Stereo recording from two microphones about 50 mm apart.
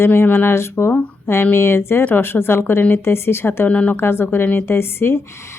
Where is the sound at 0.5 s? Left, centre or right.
Left.